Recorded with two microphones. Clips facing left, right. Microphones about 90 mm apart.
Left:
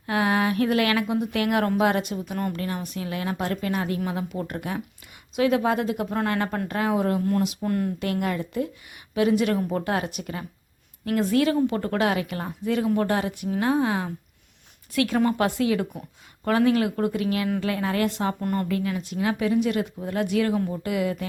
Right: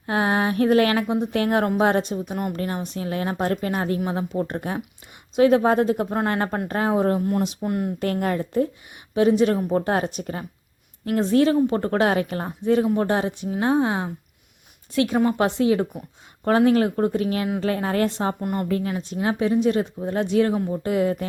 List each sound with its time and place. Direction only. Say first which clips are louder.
0.0 s a woman's voice: right 1 dB; 30° right (ahead or behind)
2.6 s a woman's voice: right 3 dB; 30° right (ahead or behind)
7.6 s speech: even; 20° right (ahead or behind)
7.9 s a woman's voice: right 3 dB; 40° right (ahead or behind)
18.3 s a woman's voice: right 1 dB; 15° right (ahead or behind)
18.7 s speech: right 2 dB; 30° right (ahead or behind)